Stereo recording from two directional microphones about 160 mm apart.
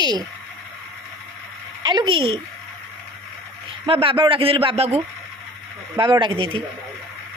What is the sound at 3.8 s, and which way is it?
A man's voice, 35° right (ahead or behind).